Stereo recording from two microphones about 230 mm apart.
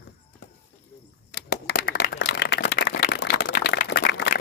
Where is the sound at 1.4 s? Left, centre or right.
Left.